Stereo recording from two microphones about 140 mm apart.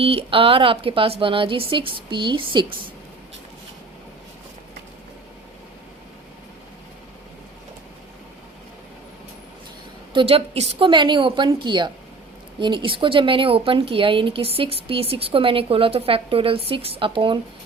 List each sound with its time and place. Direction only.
0.0 s speech: 40° right (ahead or behind)
10.1 s speech: 40° right (ahead or behind)